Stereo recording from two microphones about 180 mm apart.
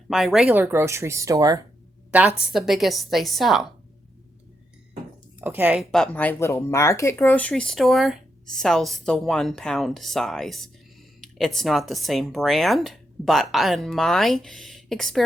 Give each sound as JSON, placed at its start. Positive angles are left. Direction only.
{"t": 0.1, "sound": "speech", "side_deg": 0}
{"t": 2.0, "sound": "a woman's voice", "side_deg": -5}
{"t": 5.4, "sound": "speech", "side_deg": -10}